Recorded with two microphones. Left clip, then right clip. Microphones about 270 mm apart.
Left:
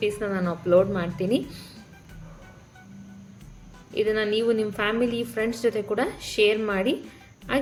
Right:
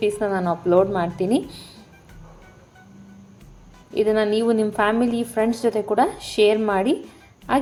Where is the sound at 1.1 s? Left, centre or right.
Centre.